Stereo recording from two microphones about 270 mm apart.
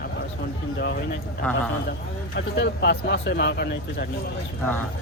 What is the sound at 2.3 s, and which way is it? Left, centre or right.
Speech, left.